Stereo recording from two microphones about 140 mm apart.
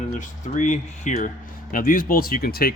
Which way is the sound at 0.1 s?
60° left (ahead or behind).